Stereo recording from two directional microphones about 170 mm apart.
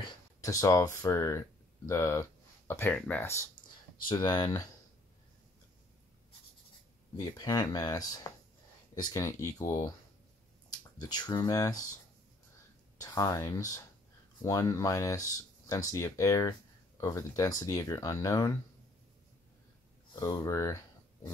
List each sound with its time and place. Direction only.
0.0 s speech: 20° left (ahead or behind)
4.0 s speech: 25° left (ahead or behind)
7.2 s speech: 20° left (ahead or behind)
12.9 s speech: 20° left (ahead or behind)
20.2 s speech: 20° left (ahead or behind)